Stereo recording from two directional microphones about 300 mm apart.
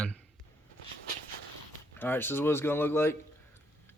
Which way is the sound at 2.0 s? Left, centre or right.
Centre.